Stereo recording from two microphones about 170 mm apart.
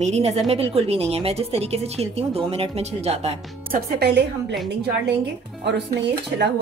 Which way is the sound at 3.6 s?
65° right (ahead or behind).